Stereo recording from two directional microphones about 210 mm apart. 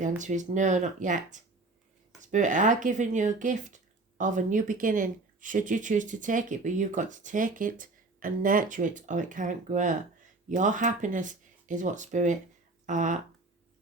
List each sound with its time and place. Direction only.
0.2 s speech: 35° right (ahead or behind)